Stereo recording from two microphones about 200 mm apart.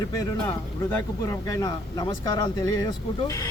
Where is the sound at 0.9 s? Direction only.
10° left (ahead or behind).